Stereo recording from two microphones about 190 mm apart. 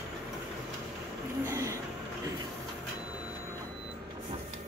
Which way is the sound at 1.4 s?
15° right (ahead or behind).